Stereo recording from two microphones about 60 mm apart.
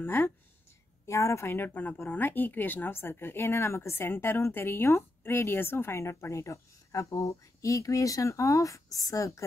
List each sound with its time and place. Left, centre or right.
0.0 s speech: left
1.0 s speech: left